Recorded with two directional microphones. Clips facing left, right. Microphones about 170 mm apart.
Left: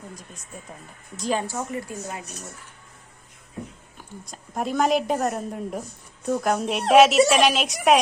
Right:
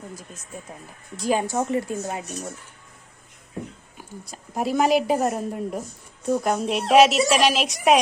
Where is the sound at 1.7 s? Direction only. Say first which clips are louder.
Right 6 dB; 30° right (ahead or behind).